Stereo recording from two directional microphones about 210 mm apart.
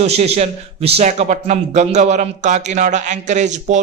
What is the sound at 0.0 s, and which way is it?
A man's voice, 30° right (ahead or behind).